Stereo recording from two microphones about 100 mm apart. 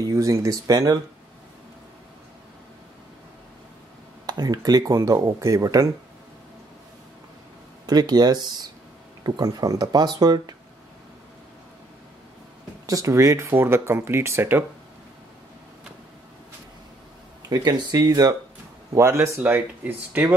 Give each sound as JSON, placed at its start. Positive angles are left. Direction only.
{"t": 0.0, "sound": "speech", "side_deg": -30}
{"t": 4.3, "sound": "speech", "side_deg": -40}
{"t": 7.8, "sound": "speech", "side_deg": -40}
{"t": 12.8, "sound": "speech", "side_deg": -35}
{"t": 17.5, "sound": "speech", "side_deg": -40}
{"t": 18.9, "sound": "speech", "side_deg": -30}
{"t": 19.4, "sound": "speech", "side_deg": -15}